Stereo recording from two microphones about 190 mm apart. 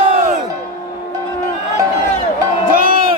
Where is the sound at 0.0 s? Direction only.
40° right (ahead or behind).